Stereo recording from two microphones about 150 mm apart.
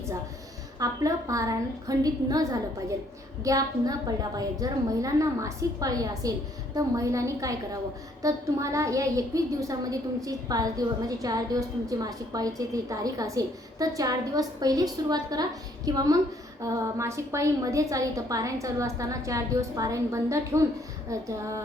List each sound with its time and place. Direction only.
0.8 s a woman's voice: 20° right (ahead or behind)